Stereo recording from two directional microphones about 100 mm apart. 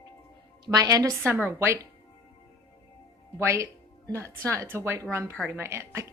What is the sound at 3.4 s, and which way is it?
A woman's voice, 25° right (ahead or behind).